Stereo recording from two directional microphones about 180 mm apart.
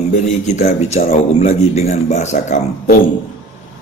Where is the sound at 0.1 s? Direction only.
40° left (ahead or behind).